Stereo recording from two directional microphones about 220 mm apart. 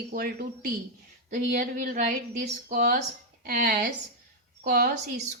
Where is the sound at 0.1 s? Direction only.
40° right (ahead or behind).